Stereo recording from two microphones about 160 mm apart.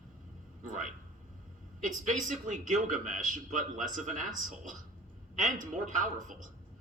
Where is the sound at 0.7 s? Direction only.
50° right (ahead or behind).